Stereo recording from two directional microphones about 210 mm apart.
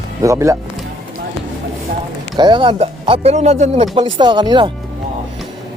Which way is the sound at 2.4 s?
20° right (ahead or behind).